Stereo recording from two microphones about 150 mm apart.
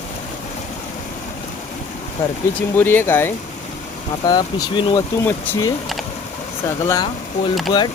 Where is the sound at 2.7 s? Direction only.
15° left (ahead or behind).